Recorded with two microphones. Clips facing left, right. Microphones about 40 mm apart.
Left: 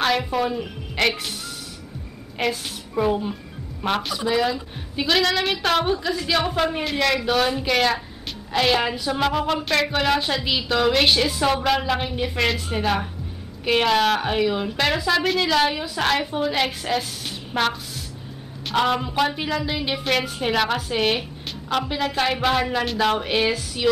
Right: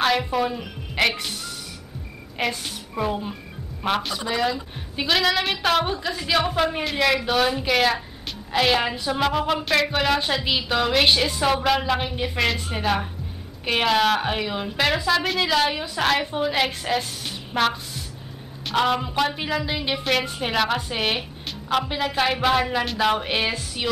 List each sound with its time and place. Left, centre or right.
0.0 s speech: centre
2.3 s a woman's voice: centre